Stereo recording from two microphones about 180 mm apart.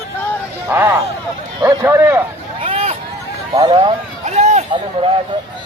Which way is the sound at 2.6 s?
35° right (ahead or behind).